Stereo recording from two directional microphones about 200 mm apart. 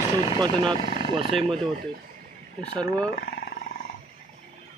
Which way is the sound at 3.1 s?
50° left (ahead or behind).